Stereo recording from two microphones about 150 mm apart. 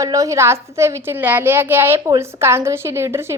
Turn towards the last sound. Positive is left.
turn(degrees=-15)  # may be behind; listen again after turning